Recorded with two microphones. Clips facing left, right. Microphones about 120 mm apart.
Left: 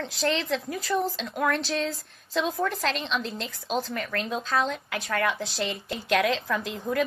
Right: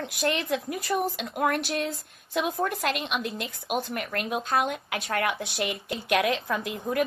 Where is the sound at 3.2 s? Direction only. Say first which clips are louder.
Right 1 dB; 25° left (ahead or behind).